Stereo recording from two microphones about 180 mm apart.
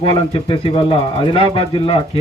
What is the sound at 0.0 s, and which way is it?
Speech, 30° left (ahead or behind).